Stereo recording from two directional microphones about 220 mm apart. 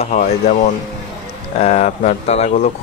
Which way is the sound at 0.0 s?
30° left (ahead or behind).